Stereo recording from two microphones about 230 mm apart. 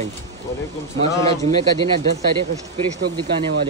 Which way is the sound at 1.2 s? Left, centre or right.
Right.